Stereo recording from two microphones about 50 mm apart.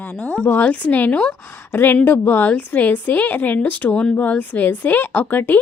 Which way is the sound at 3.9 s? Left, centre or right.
Left.